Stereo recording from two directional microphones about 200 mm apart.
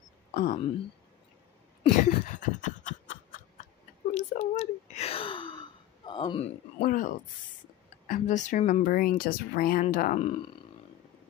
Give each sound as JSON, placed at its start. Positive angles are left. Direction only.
{"t": 0.3, "sound": "speech", "side_deg": 40}
{"t": 1.8, "sound": "a sound", "side_deg": 40}
{"t": 6.8, "sound": "speech", "side_deg": 45}